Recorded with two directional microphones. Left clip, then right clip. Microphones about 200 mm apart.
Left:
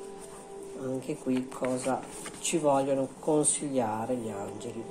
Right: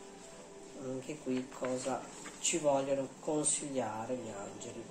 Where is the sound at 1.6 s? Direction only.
55° left (ahead or behind).